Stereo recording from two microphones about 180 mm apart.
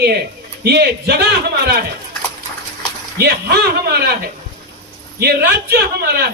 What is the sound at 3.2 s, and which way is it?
Speech, 60° right (ahead or behind).